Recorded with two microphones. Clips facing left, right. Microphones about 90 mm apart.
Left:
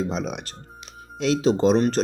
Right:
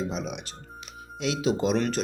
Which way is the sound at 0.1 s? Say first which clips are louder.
Left 4 dB; 40° left (ahead or behind).